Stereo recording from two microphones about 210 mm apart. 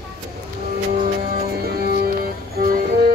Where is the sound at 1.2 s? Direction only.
45° right (ahead or behind).